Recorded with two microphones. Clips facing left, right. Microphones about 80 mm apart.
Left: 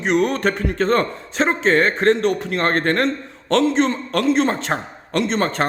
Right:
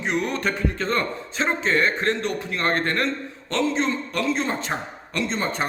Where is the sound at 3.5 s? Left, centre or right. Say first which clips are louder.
Left 6 dB; left.